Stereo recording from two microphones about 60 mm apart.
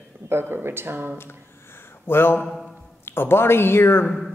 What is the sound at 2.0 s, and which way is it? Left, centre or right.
Speech, left.